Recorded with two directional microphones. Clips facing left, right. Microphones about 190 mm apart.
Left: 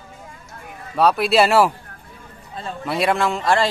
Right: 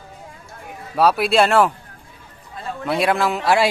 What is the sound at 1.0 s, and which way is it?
Speech, centre (ahead or behind).